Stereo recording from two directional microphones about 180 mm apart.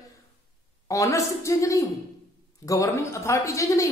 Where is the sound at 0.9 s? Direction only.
15° left (ahead or behind).